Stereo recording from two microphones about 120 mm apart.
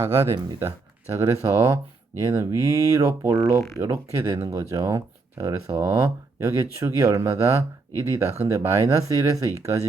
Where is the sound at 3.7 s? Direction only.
20° right (ahead or behind).